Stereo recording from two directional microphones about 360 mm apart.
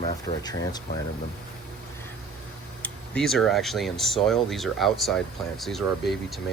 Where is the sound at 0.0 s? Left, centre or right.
Centre.